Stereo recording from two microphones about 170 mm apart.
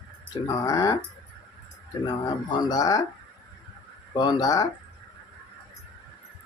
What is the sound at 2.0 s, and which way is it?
Speech, 25° left (ahead or behind).